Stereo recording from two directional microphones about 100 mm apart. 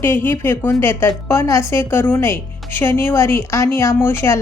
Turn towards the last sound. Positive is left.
turn(degrees=25)  # may be behind; listen again after turning